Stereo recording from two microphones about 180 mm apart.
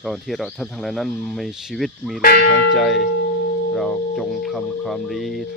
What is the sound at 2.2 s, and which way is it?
Speech, 55° left (ahead or behind).